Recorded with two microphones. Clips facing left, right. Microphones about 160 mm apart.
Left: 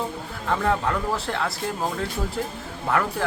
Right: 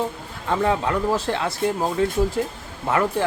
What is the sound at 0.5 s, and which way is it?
Speech, 15° right (ahead or behind).